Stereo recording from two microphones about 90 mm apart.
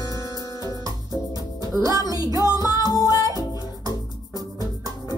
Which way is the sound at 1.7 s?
40° right (ahead or behind).